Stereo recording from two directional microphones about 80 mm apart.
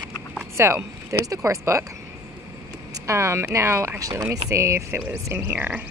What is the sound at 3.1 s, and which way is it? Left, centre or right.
Speech, right.